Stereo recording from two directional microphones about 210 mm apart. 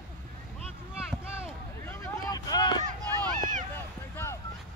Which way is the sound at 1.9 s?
15° left (ahead or behind).